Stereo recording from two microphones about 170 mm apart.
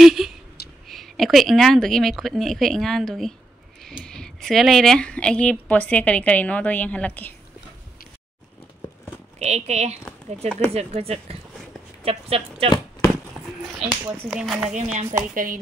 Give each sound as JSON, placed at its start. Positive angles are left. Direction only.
{"t": 0.0, "sound": "a sound", "side_deg": 0}
{"t": 0.8, "sound": "speech", "side_deg": 0}
{"t": 9.4, "sound": "speech", "side_deg": -40}
{"t": 13.4, "sound": "a sound", "side_deg": -5}
{"t": 13.7, "sound": "speech", "side_deg": -5}
{"t": 14.7, "sound": "a woman's voice", "side_deg": -45}